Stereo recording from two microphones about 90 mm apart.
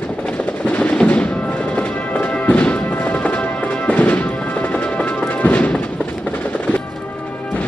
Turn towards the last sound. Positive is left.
turn(degrees=15)  # may be behind; listen again after turning